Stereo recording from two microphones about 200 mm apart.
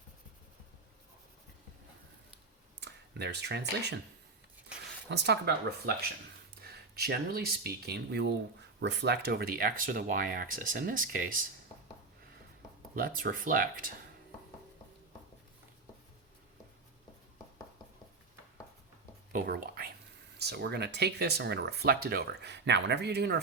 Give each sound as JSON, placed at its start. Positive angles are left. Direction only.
{"t": 2.8, "sound": "speech", "side_deg": -60}
{"t": 5.0, "sound": "speech", "side_deg": -60}
{"t": 13.0, "sound": "speech", "side_deg": -45}
{"t": 19.3, "sound": "a sound", "side_deg": -45}
{"t": 20.4, "sound": "speech", "side_deg": -55}